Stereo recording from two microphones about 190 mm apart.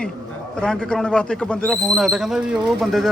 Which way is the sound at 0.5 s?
5° left (ahead or behind).